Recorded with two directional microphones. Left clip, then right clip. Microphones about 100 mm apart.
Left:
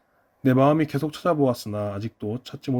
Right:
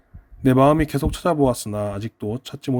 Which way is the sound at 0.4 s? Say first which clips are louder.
Right 3 dB; 40° right (ahead or behind).